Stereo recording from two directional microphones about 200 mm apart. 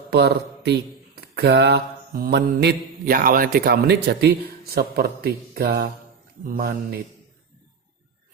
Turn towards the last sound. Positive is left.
turn(degrees=-50)  # may be behind; listen again after turning